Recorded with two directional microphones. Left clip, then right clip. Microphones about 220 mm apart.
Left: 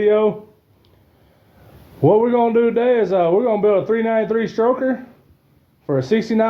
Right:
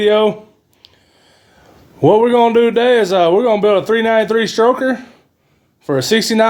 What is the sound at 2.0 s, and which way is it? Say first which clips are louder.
A man's voice: right 4 dB; 35° right (ahead or behind).